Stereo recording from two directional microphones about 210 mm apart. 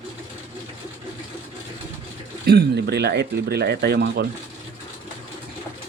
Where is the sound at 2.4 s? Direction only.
50° right (ahead or behind).